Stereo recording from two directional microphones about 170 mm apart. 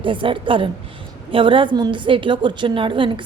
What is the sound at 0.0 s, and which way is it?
A woman's voice, 30° right (ahead or behind).